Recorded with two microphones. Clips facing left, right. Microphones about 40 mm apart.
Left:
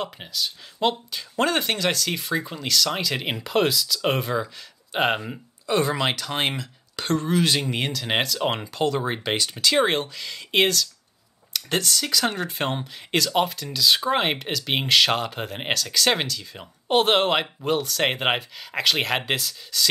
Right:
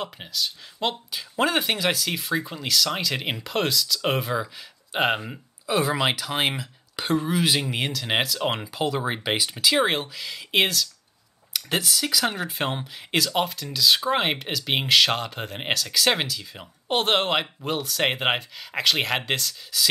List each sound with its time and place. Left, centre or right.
0.0 s speech: centre